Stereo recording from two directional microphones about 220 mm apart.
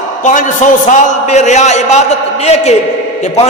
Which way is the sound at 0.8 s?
30° left (ahead or behind).